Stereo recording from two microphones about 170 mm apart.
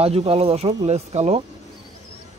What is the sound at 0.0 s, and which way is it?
Speech, 35° right (ahead or behind).